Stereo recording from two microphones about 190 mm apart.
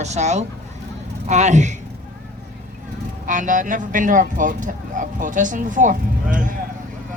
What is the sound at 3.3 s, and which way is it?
Speech, 45° right (ahead or behind).